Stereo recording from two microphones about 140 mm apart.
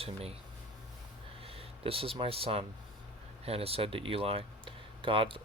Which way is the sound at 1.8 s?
40° right (ahead or behind).